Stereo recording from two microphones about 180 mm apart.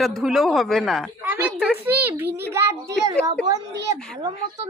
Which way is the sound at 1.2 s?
10° right (ahead or behind).